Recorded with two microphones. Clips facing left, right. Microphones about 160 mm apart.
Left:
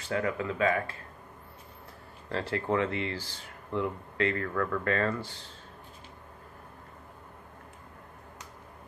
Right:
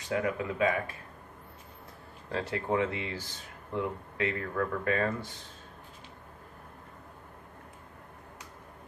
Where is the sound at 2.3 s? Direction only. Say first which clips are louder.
Left 1 dB; 15° right (ahead or behind).